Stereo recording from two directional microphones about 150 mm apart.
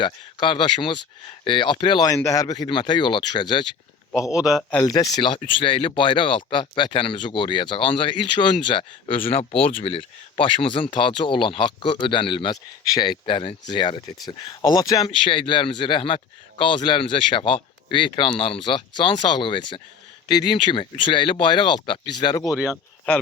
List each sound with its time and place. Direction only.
0.0 s speech: 35° left (ahead or behind)
4.1 s a man's voice: 5° right (ahead or behind)
4.9 s speech: 25° left (ahead or behind)
23.1 s speech: 10° left (ahead or behind)